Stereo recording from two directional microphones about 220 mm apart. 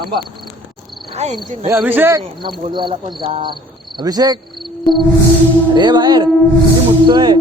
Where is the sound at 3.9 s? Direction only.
15° right (ahead or behind).